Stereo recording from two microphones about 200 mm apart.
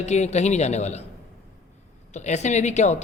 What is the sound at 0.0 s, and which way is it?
Speech, 35° left (ahead or behind).